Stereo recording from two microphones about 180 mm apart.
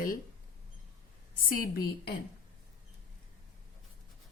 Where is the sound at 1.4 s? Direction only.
55° left (ahead or behind).